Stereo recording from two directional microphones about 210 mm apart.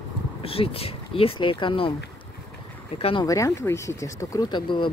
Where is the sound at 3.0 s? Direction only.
25° left (ahead or behind).